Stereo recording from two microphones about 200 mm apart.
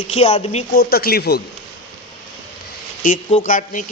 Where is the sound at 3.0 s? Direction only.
40° left (ahead or behind).